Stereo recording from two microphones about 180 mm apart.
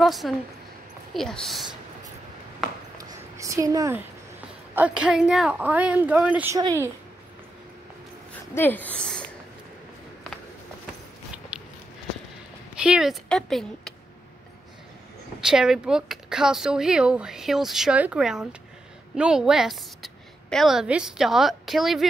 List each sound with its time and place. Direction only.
0.0 s a woman's voice: centre (ahead or behind)
3.3 s a woman's voice: 15° right (ahead or behind)
4.7 s a woman's voice: 5° right (ahead or behind)
8.5 s speech: 10° left (ahead or behind)
11.5 s a sound: 5° right (ahead or behind)
12.7 s speech: 5° right (ahead or behind)
15.4 s a woman's voice: 5° right (ahead or behind)